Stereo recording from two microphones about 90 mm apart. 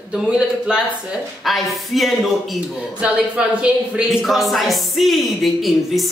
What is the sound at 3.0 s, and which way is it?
Speech, 10° right (ahead or behind).